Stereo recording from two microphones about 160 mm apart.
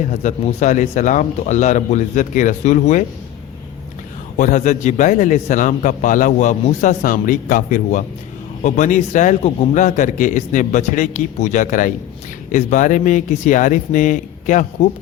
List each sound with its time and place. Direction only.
0.1 s a man's voice: 50° left (ahead or behind)
4.4 s a man's voice: 50° left (ahead or behind)